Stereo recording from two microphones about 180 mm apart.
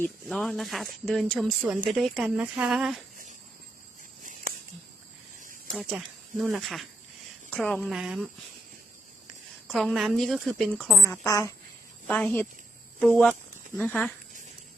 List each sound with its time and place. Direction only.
0.0 s speech: centre (ahead or behind)
4.2 s a sound: 45° right (ahead or behind)
5.4 s snake: 45° right (ahead or behind)
6.4 s speech: centre (ahead or behind)
9.6 s speech: centre (ahead or behind)
11.1 s a woman's voice: 15° left (ahead or behind)
13.7 s a woman's voice: 5° left (ahead or behind)